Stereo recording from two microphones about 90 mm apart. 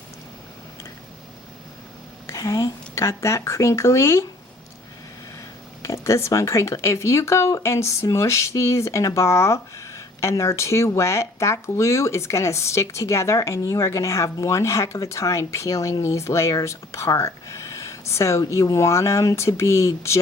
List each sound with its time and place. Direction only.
2.2 s speech: 35° left (ahead or behind)
5.8 s speech: 35° left (ahead or behind)